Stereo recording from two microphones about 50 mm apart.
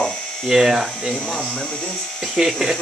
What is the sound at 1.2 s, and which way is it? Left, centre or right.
Speech, centre.